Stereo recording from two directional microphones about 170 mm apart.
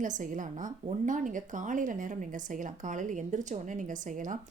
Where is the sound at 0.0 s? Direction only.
50° right (ahead or behind).